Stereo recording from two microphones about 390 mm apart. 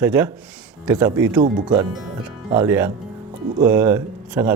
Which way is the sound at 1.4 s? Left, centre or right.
Centre.